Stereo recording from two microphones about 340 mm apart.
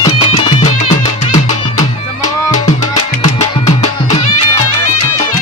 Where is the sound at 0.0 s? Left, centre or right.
Centre.